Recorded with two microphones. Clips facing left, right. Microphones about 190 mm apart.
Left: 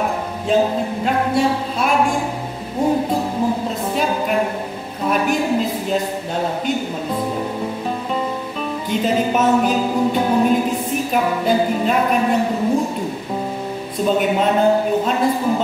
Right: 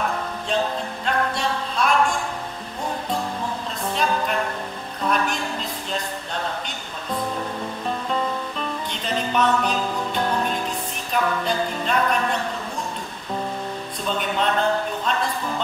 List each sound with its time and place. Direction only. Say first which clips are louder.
0.5 s a sound: left 8 dB; 10° left (ahead or behind)
3.9 s music: left 3 dB; 10° left (ahead or behind)
5.0 s speech: left 6 dB; 5° left (ahead or behind)
8.9 s speech: left 8 dB; 5° left (ahead or behind)
10.1 s music: left 7 dB; 10° left (ahead or behind)
14.0 s speech: left 7 dB; 10° left (ahead or behind)